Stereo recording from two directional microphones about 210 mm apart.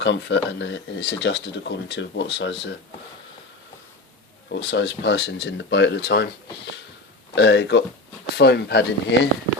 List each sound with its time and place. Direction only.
0.0 s speech: 60° left (ahead or behind)
4.4 s speech: 55° left (ahead or behind)
7.3 s speech: 55° left (ahead or behind)